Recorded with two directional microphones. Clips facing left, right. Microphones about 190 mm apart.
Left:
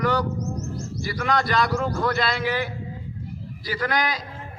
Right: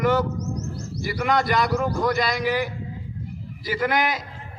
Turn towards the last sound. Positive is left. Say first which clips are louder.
# right 2 dB
turn(degrees=-25)  # may be behind; listen again after turning